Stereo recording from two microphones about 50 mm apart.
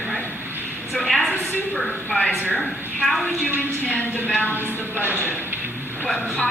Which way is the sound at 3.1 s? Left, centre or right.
Centre.